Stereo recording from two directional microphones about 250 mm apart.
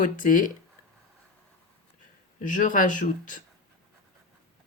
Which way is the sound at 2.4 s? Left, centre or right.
Left.